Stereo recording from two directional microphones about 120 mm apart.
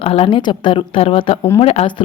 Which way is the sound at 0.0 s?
50° left (ahead or behind).